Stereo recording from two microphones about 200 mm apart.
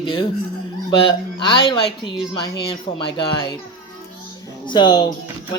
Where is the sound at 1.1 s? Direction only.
25° left (ahead or behind).